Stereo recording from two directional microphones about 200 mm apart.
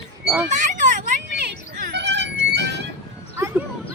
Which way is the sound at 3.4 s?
15° right (ahead or behind).